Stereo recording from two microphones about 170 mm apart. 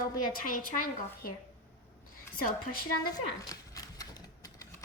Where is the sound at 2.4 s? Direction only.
60° left (ahead or behind).